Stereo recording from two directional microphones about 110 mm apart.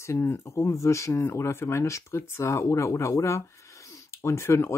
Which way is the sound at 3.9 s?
25° left (ahead or behind).